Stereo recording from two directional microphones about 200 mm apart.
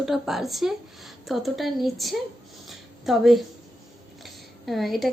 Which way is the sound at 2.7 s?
Centre (ahead or behind).